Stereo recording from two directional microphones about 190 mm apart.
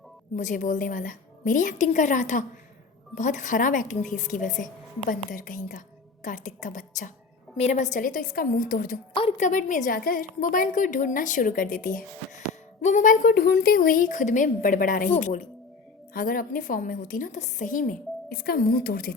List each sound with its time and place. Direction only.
0.3 s a woman's voice: 40° left (ahead or behind)
9.1 s a woman's voice: 35° left (ahead or behind); by 19.1 s 50° left (ahead or behind)